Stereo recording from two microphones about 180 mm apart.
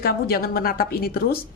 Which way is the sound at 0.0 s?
60° left (ahead or behind).